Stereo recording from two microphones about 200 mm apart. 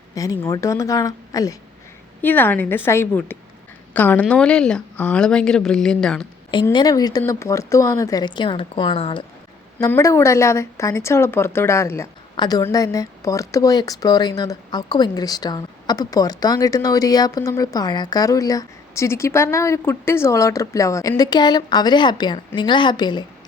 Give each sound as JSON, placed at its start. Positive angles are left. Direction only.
{"t": 0.1, "sound": "a woman's voice", "side_deg": 15}
{"t": 6.7, "sound": "speech", "side_deg": 20}
{"t": 9.7, "sound": "speech", "side_deg": 10}